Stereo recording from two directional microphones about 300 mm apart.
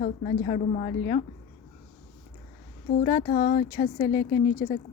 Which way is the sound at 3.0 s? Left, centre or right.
Left.